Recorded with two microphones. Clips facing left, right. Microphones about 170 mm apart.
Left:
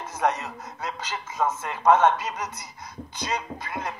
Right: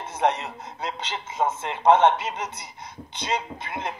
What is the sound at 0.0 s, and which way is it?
A man's voice, 30° right (ahead or behind).